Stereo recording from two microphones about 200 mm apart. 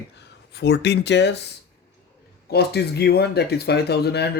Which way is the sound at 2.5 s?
55° left (ahead or behind).